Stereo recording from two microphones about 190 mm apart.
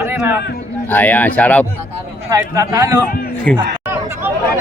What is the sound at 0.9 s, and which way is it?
Speech, 10° left (ahead or behind).